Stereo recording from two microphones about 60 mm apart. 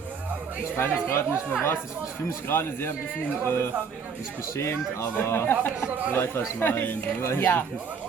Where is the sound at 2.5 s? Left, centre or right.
Left.